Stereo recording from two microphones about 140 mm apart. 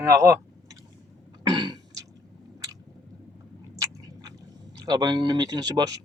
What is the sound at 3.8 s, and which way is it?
Chewing, 25° right (ahead or behind).